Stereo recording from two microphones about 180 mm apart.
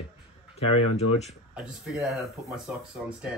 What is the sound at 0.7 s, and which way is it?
Speech, 35° left (ahead or behind).